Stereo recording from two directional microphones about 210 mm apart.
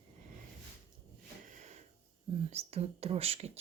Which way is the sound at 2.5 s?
30° right (ahead or behind).